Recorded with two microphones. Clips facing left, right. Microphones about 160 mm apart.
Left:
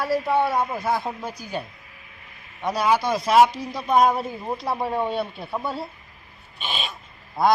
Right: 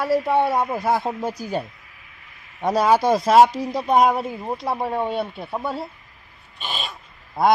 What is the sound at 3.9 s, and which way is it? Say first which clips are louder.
Speech: right 1 dB; 20° right (ahead or behind).